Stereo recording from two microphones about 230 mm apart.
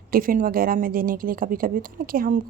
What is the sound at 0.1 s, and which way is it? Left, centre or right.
Speech, right.